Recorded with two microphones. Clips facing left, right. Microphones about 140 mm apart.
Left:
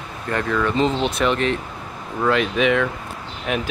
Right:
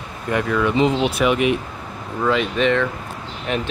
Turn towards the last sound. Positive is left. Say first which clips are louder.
# even
turn(degrees=5)  # may be behind; listen again after turning